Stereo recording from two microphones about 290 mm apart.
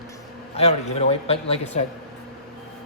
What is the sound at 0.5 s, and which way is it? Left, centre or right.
A man's voice, left.